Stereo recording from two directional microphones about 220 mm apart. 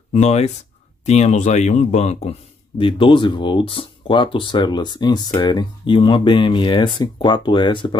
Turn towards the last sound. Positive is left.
turn(degrees=20)  # may be behind; listen again after turning